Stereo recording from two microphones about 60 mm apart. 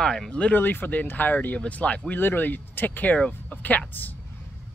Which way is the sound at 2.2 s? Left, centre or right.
Left.